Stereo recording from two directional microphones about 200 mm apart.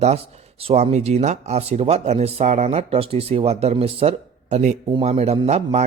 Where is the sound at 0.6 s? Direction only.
30° right (ahead or behind).